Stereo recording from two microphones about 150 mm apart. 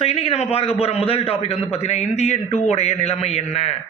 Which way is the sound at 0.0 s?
40° left (ahead or behind).